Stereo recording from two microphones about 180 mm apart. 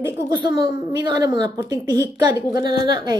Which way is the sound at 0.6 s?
25° right (ahead or behind).